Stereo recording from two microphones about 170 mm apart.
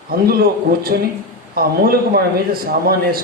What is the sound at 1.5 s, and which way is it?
A man's voice, 60° right (ahead or behind).